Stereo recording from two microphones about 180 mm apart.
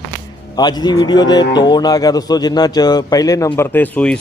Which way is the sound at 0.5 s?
20° left (ahead or behind).